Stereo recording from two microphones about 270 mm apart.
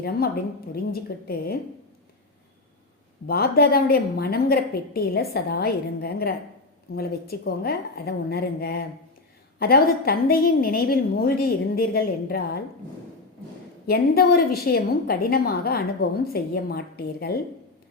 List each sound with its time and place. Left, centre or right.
0.7 s a woman's voice: left
3.2 s a woman's voice: left
13.8 s a woman's voice: left